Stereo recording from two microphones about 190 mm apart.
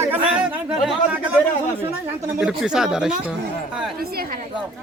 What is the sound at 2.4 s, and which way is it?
Speech, 5° right (ahead or behind).